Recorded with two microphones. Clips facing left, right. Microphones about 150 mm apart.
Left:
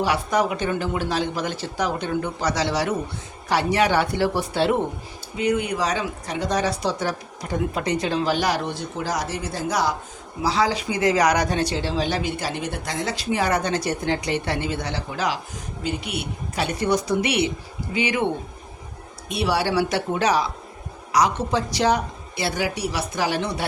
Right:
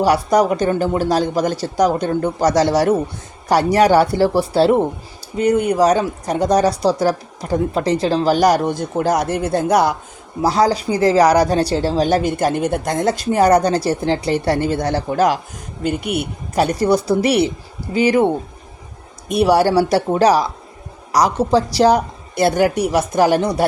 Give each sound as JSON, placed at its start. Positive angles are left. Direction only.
{"t": 0.0, "sound": "speech", "side_deg": -40}
{"t": 10.4, "sound": "speech", "side_deg": -45}
{"t": 19.3, "sound": "speech", "side_deg": -45}